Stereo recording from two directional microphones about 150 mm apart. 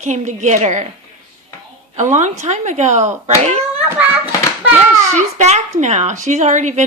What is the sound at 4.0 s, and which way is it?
Hands, 10° right (ahead or behind).